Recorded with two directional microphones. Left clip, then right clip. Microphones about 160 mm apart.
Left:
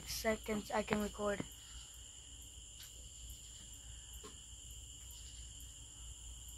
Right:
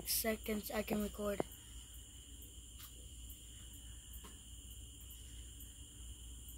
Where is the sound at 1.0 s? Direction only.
90° right.